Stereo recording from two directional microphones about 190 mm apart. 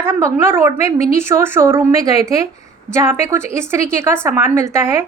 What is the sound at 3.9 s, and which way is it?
Speech, 10° right (ahead or behind).